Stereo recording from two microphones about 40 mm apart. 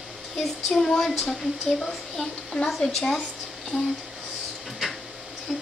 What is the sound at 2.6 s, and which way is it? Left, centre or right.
Speech, centre.